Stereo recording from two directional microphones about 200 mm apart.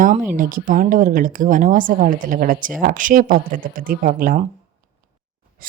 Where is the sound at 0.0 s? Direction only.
40° right (ahead or behind).